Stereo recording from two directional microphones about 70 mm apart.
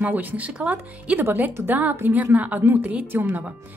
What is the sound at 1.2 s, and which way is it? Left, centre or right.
Speech, right.